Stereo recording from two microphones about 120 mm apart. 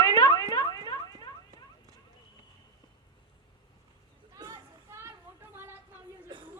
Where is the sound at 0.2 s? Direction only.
30° left (ahead or behind).